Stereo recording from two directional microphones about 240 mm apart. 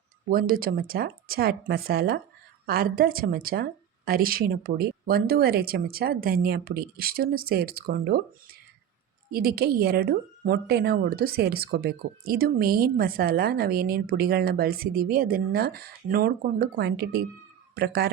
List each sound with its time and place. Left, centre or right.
0.3 s speech: right
9.3 s speech: right